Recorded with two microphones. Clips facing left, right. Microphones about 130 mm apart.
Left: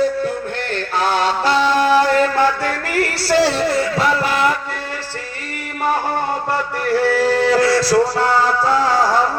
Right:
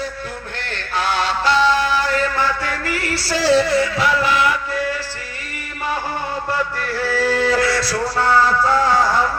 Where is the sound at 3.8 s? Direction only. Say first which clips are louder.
Left 1 dB; 40° left (ahead or behind).